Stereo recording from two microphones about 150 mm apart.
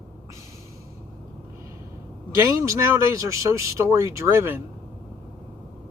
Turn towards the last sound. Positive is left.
turn(degrees=-15)  # may be behind; listen again after turning